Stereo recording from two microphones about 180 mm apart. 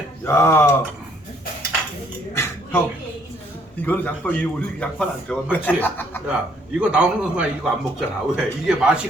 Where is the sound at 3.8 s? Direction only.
10° left (ahead or behind).